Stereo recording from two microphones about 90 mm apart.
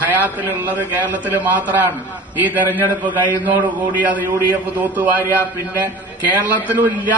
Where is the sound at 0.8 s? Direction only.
20° right (ahead or behind).